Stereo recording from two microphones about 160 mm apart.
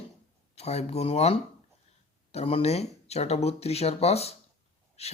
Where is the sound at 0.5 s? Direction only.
40° left (ahead or behind).